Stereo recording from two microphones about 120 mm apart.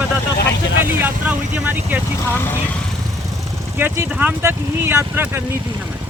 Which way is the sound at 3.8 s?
20° right (ahead or behind).